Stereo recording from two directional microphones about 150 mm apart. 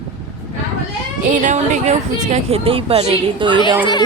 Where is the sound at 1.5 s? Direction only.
55° right (ahead or behind); by 3.6 s 35° right (ahead or behind).